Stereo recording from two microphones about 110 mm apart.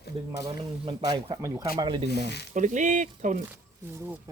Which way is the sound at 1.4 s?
30° right (ahead or behind).